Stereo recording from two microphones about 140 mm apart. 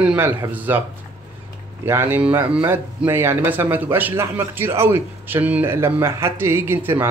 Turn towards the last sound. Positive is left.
turn(degrees=-15)  # may be behind; listen again after turning